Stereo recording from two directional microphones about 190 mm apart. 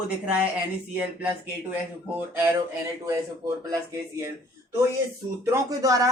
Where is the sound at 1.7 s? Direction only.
10° right (ahead or behind).